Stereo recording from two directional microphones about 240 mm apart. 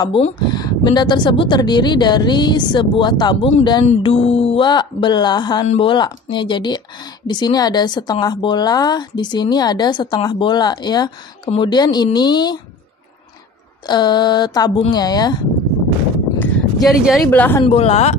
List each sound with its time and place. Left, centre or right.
0.0 s speech: centre
13.8 s speech: centre
16.3 s a sound: centre
17.3 s speech: centre
17.6 s speech: left